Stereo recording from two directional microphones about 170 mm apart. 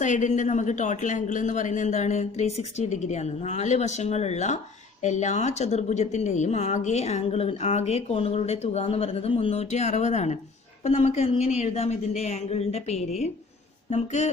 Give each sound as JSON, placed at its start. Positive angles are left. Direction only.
{"t": 0.0, "sound": "a man's voice", "side_deg": 45}